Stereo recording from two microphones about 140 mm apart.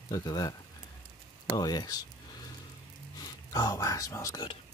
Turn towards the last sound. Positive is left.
turn(degrees=25)  # may be behind; listen again after turning